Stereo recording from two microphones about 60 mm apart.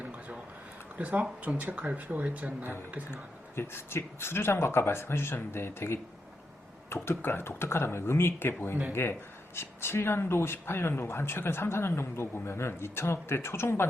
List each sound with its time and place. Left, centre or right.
0.9 s speech: right
3.1 s speech: left